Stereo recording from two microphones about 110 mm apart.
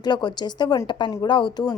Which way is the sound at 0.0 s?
40° left (ahead or behind).